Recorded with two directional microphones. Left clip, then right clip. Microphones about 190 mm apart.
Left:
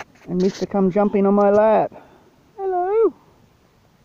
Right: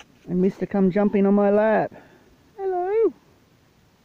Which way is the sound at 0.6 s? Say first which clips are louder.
Left 3 dB; 10° right (ahead or behind).